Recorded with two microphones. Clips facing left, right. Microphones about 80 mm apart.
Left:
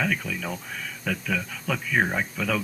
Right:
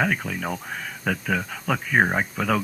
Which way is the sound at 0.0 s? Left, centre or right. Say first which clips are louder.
Right 3 dB; right.